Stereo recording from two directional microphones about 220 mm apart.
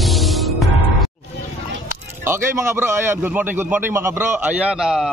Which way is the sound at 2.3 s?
10° right (ahead or behind).